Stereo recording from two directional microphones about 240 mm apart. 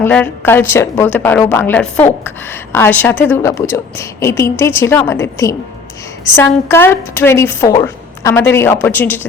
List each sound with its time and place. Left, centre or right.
0.0 s a woman's voice: centre